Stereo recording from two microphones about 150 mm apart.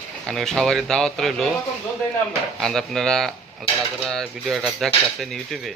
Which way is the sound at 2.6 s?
5° left (ahead or behind).